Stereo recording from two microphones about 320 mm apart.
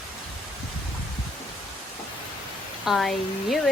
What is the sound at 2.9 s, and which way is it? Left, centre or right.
Speech, centre.